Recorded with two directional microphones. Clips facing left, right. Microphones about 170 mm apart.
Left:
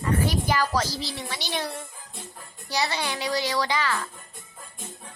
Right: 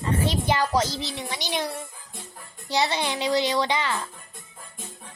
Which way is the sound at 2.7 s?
20° right (ahead or behind).